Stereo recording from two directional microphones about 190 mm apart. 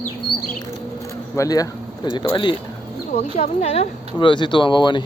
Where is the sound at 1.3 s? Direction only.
15° left (ahead or behind).